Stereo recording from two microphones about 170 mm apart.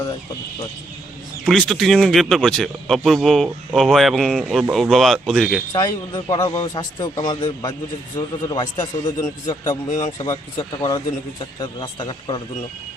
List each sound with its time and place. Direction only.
1.5 s speech: centre (ahead or behind)
5.7 s a man's voice: 25° left (ahead or behind)